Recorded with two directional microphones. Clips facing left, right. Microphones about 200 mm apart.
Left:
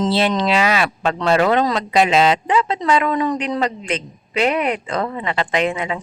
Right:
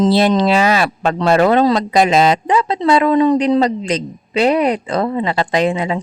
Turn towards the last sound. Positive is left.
turn(degrees=-35)  # may be behind; listen again after turning